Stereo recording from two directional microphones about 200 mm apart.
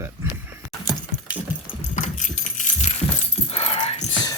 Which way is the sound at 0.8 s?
5° right (ahead or behind).